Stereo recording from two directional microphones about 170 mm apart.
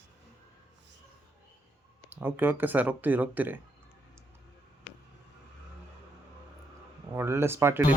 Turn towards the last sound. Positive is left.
turn(degrees=-15)  # may be behind; listen again after turning